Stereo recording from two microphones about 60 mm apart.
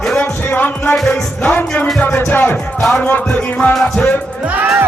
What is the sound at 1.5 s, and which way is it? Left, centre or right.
Speech, left.